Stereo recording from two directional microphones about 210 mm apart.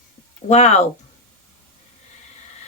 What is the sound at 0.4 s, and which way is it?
Speech, 35° left (ahead or behind).